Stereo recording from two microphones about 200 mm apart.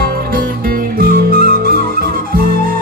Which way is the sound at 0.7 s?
45° right (ahead or behind).